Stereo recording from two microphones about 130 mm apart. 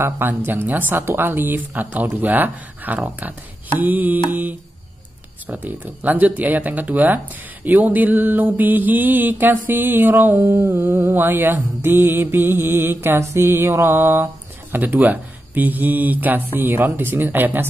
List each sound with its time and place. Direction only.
0.0 s mantra: 15° right (ahead or behind)